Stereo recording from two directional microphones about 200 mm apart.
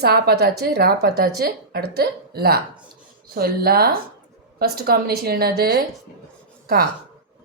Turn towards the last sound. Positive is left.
turn(degrees=-50)  # may be behind; listen again after turning